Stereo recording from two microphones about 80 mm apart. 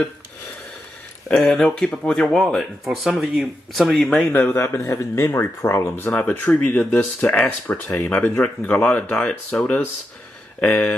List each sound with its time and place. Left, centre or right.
1.3 s speech: centre
4.3 s speech: left
4.6 s speech: left
6.1 s speech: centre